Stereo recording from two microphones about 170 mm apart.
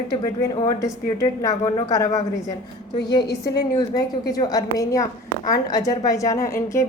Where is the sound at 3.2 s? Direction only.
70° left (ahead or behind).